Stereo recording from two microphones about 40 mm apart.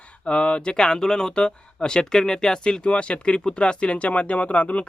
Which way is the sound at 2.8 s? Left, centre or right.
Left.